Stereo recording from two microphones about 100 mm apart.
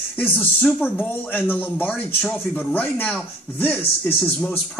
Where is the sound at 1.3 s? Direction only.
20° left (ahead or behind).